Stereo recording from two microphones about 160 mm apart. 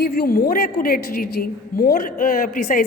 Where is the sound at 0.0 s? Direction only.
70° left (ahead or behind).